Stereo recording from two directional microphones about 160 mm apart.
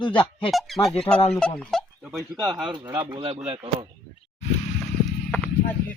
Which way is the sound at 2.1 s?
20° right (ahead or behind).